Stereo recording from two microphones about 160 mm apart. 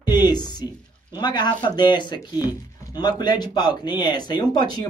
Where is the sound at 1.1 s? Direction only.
25° left (ahead or behind).